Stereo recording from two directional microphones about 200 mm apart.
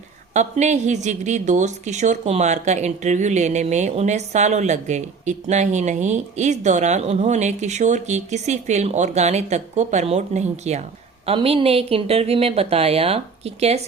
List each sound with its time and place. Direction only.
0.3 s speech: 35° right (ahead or behind)